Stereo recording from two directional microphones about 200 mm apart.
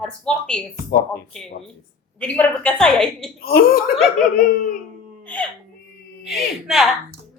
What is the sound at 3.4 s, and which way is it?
Speech, 50° left (ahead or behind).